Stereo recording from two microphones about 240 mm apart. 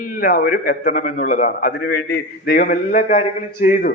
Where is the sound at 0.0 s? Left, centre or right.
Left.